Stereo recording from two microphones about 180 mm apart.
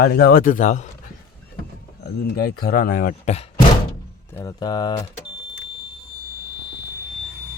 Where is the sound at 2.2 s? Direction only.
55° left (ahead or behind).